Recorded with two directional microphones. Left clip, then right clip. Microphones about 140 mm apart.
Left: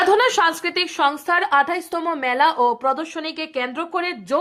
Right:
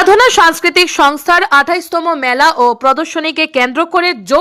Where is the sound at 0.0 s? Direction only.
50° right (ahead or behind).